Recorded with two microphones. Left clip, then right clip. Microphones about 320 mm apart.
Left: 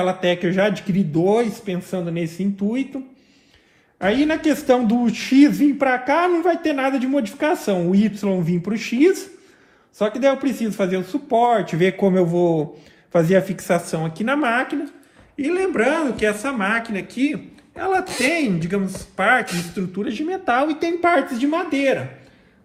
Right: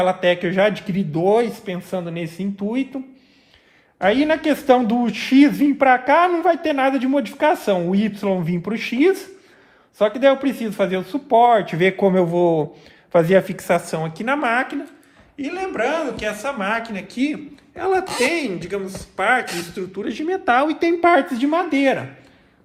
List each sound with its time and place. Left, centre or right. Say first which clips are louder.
0.0 s a man's voice: right 2 dB; right
3.9 s a man's voice: right 2 dB; right
15.4 s a man's voice: left 3 dB; centre